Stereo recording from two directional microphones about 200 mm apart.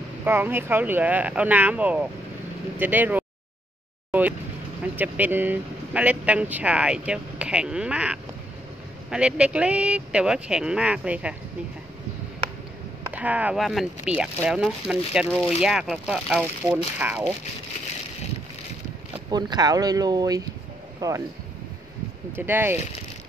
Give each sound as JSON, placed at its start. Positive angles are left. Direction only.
{"t": 0.2, "sound": "speech", "side_deg": -10}
{"t": 4.1, "sound": "music", "side_deg": -10}
{"t": 4.9, "sound": "speech", "side_deg": -10}
{"t": 13.1, "sound": "speech", "side_deg": -5}
{"t": 19.3, "sound": "speech", "side_deg": -20}
{"t": 22.3, "sound": "speech", "side_deg": -10}